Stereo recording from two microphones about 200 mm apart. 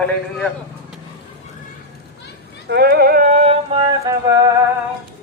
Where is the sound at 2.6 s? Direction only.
55° right (ahead or behind); by 4.5 s 15° right (ahead or behind).